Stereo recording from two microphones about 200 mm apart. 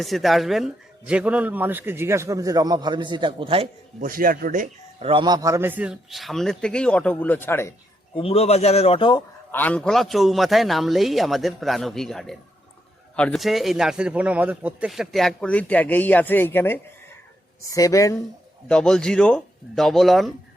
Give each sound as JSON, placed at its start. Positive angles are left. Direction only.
{"t": 0.0, "sound": "a man's voice", "side_deg": 0}
{"t": 4.0, "sound": "speech", "side_deg": -45}
{"t": 5.0, "sound": "a man's voice", "side_deg": -25}
{"t": 8.1, "sound": "a man's voice", "side_deg": 30}
{"t": 9.5, "sound": "a man's voice", "side_deg": 10}
{"t": 18.7, "sound": "a man's voice", "side_deg": 5}